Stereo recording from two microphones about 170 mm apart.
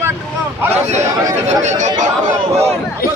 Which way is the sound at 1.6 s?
45° right (ahead or behind).